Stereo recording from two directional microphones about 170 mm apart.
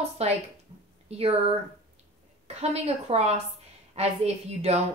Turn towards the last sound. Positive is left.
turn(degrees=-40)  # may be behind; listen again after turning